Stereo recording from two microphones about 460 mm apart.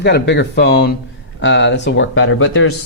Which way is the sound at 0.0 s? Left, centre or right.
Left.